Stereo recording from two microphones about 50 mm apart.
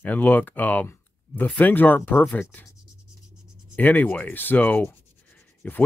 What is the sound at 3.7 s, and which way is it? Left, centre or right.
Speech, left.